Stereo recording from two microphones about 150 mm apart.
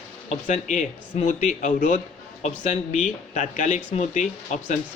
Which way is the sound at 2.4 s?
50° left (ahead or behind).